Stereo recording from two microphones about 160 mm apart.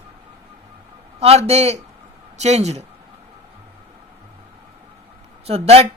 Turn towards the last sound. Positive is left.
turn(degrees=-40)  # may be behind; listen again after turning